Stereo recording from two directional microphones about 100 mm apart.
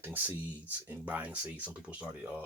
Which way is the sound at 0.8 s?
20° right (ahead or behind).